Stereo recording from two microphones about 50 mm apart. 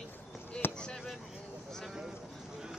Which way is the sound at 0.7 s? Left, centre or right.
Centre.